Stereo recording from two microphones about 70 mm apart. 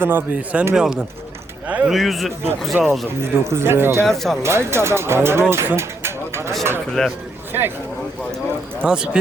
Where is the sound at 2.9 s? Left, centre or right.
Right.